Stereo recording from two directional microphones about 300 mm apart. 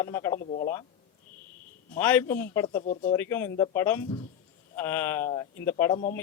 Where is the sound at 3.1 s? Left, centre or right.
Centre.